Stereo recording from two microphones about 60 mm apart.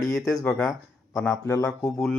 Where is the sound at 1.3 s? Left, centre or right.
Left.